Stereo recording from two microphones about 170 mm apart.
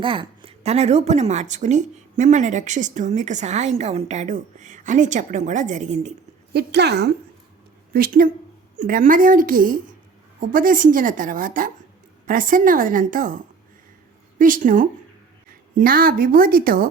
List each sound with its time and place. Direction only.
0.0 s a woman's voice: 30° right (ahead or behind)
6.5 s a woman's voice: 75° right (ahead or behind)
7.9 s a woman's voice: 60° right (ahead or behind)